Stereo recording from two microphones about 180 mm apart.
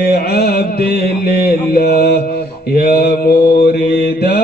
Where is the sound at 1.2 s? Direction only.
60° left (ahead or behind).